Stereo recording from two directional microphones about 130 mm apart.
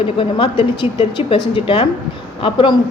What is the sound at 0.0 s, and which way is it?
A man's voice, 40° left (ahead or behind).